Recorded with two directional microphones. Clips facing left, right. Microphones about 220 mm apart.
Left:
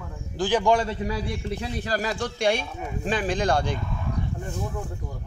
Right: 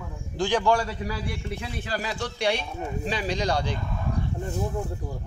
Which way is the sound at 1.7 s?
40° left (ahead or behind).